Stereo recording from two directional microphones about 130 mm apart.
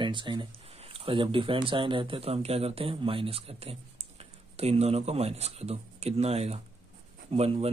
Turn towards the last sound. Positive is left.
turn(degrees=-50)  # may be behind; listen again after turning